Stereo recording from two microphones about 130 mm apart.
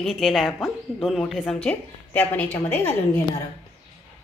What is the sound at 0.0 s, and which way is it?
A woman's voice, centre (ahead or behind).